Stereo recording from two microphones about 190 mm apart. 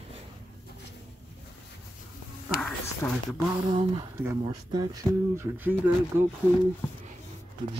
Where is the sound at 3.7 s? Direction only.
30° right (ahead or behind); by 5.9 s 10° right (ahead or behind).